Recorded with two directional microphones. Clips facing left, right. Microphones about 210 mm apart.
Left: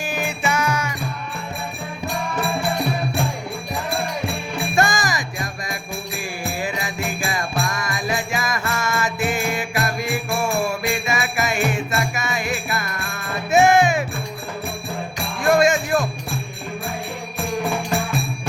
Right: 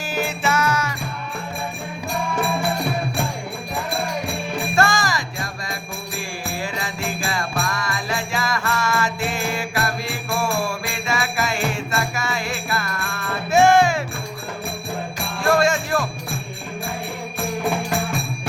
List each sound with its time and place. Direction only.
0.4 s music: 15° left (ahead or behind)
4.7 s music: 15° left (ahead or behind)
6.6 s jingle bell: 20° left (ahead or behind)
13.5 s music: 20° left (ahead or behind)
15.4 s music: 15° left (ahead or behind)